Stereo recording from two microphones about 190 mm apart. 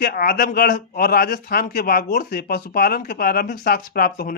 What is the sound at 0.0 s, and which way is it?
Speech, 50° left (ahead or behind).